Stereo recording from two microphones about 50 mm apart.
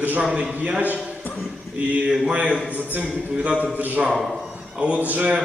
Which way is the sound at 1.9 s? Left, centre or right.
Right.